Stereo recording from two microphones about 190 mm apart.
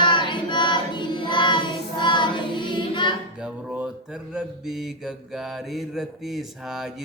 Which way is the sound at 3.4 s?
5° right (ahead or behind).